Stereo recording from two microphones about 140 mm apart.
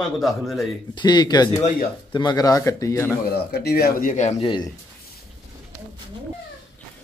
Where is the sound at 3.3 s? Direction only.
90° left; by 4.4 s 60° left (ahead or behind).